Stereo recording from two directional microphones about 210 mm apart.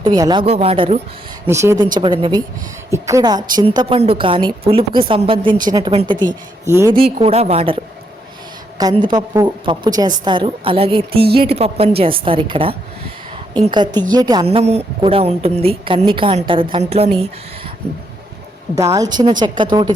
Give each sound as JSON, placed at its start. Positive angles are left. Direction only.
{"t": 0.0, "sound": "a woman's voice", "side_deg": -20}
{"t": 1.5, "sound": "a woman's voice", "side_deg": -15}
{"t": 6.9, "sound": "a woman's voice", "side_deg": -25}
{"t": 8.8, "sound": "a woman's voice", "side_deg": -20}
{"t": 18.8, "sound": "a woman's voice", "side_deg": -15}